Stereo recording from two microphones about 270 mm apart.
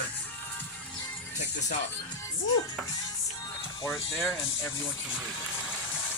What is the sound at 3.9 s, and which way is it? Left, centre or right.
Speech, centre.